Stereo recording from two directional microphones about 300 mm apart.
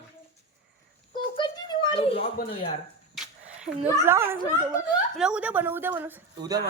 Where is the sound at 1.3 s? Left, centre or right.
Centre.